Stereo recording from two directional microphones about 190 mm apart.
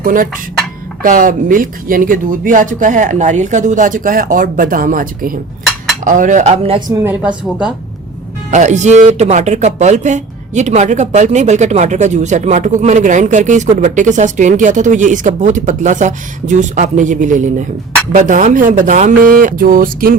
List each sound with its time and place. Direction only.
0.0 s speech: 45° right (ahead or behind)
6.7 s speech: 20° right (ahead or behind)
7.1 s a woman's voice: 10° right (ahead or behind)
8.4 s speech: 40° right (ahead or behind)